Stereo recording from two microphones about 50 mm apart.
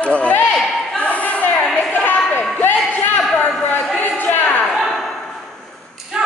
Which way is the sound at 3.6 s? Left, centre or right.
Left.